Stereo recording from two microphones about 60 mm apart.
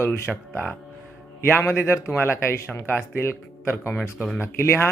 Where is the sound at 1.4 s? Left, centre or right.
Left.